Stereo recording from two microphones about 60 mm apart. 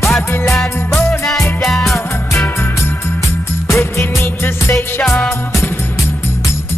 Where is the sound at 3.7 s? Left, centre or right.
Left.